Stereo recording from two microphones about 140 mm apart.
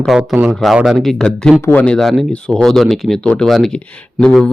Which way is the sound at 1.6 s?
15° left (ahead or behind).